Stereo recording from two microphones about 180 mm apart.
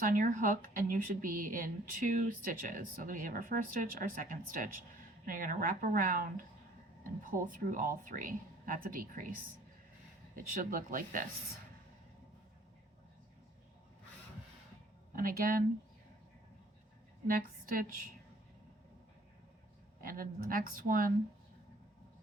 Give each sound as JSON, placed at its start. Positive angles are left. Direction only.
{"t": 0.0, "sound": "speech", "side_deg": -45}
{"t": 15.1, "sound": "speech", "side_deg": -55}
{"t": 17.3, "sound": "speech", "side_deg": -55}
{"t": 20.0, "sound": "speech", "side_deg": -50}